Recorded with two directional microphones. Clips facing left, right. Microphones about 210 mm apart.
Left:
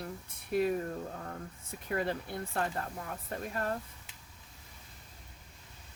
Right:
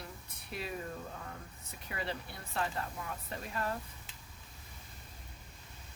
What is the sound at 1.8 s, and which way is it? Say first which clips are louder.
Speech: left 7 dB; 50° left (ahead or behind).